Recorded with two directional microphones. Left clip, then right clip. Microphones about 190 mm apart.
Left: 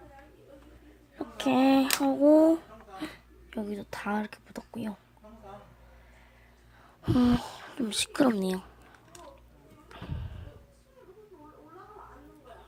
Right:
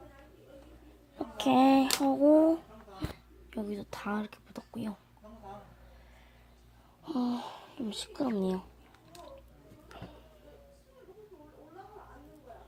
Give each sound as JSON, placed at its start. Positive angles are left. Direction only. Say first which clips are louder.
{"t": 1.1, "sound": "speech", "louder": "right 1 dB", "side_deg": 5}
{"t": 3.5, "sound": "speech", "louder": "left 2 dB", "side_deg": 5}
{"t": 7.0, "sound": "speech", "louder": "left 8 dB", "side_deg": 40}